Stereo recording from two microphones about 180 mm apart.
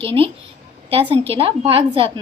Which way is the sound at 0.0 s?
30° right (ahead or behind).